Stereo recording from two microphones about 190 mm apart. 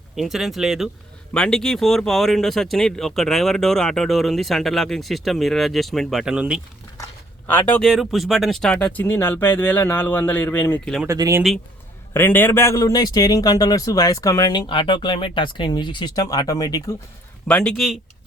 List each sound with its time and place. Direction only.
0.2 s speech: centre (ahead or behind)
7.4 s speech: 10° left (ahead or behind)
11.0 s speech: 15° right (ahead or behind)
12.1 s a man's voice: 10° left (ahead or behind)
17.5 s speech: 5° left (ahead or behind)